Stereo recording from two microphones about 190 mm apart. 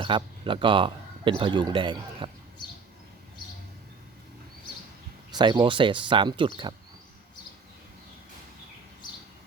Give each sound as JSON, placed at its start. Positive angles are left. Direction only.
{"t": 0.0, "sound": "a man's voice", "side_deg": -25}
{"t": 5.3, "sound": "a man's voice", "side_deg": -25}